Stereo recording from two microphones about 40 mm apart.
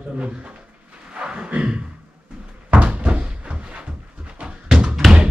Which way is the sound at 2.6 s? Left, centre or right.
Right.